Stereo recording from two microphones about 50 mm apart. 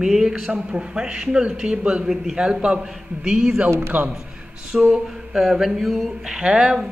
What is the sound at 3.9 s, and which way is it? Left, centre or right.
Speech, right.